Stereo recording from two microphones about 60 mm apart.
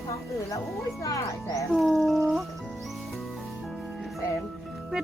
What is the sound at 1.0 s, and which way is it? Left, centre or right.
Speech, left.